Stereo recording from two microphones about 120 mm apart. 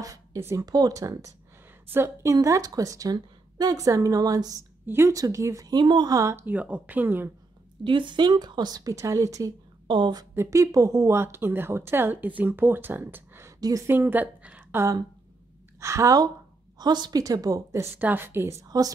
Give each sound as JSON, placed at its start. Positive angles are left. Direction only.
{"t": 0.0, "sound": "speech", "side_deg": -25}
{"t": 7.8, "sound": "a woman's voice", "side_deg": -40}
{"t": 9.8, "sound": "a woman's voice", "side_deg": -40}
{"t": 10.3, "sound": "speech", "side_deg": -25}
{"t": 13.6, "sound": "a woman's voice", "side_deg": -30}
{"t": 13.8, "sound": "a woman's voice", "side_deg": -15}
{"t": 15.8, "sound": "a woman's voice", "side_deg": -25}
{"t": 17.9, "sound": "speech", "side_deg": -15}